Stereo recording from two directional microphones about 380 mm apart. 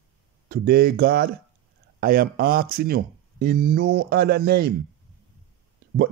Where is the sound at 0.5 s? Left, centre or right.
Right.